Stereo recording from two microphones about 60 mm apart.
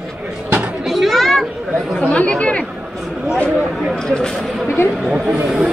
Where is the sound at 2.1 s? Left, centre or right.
Left.